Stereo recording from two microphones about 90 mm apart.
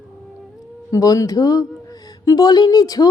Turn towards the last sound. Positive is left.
turn(degrees=45)  # may be behind; listen again after turning